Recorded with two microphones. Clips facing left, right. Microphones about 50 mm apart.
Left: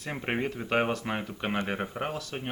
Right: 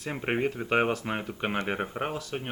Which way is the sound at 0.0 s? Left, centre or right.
Centre.